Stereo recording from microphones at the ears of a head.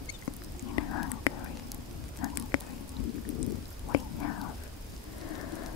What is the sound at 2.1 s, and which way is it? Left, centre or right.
Raindrop, left.